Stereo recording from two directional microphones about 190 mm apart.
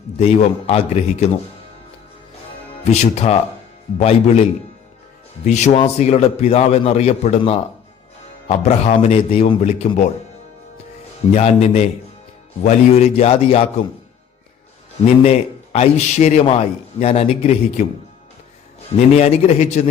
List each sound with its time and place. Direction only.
0.2 s a man's voice: 30° left (ahead or behind)
2.9 s a man's voice: 35° left (ahead or behind)
5.5 s a man's voice: 35° left (ahead or behind)
11.3 s a man's voice: 35° left (ahead or behind)
15.2 s a man's voice: 35° left (ahead or behind)
18.9 s a man's voice: 35° left (ahead or behind)